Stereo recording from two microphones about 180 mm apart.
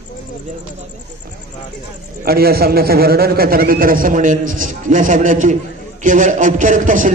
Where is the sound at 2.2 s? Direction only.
60° right (ahead or behind).